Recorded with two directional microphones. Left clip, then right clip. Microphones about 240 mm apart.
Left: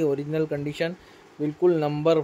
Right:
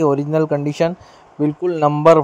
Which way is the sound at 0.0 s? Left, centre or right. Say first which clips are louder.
Right 8 dB; right.